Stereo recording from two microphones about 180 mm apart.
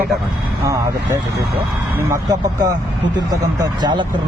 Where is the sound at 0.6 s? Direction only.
15° right (ahead or behind).